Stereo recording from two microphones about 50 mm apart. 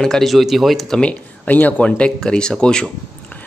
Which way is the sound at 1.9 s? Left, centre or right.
Centre.